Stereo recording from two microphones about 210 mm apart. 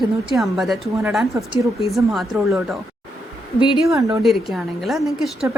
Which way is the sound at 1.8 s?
Centre (ahead or behind).